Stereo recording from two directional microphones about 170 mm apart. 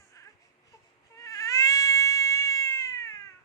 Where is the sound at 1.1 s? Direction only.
20° left (ahead or behind).